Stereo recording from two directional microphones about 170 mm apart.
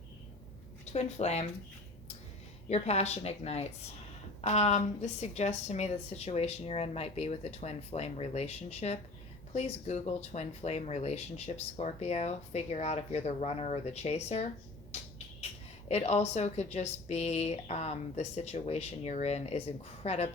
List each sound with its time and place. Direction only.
0.9 s speech: 40° left (ahead or behind)
2.6 s speech: 40° left (ahead or behind)
15.9 s speech: 40° left (ahead or behind)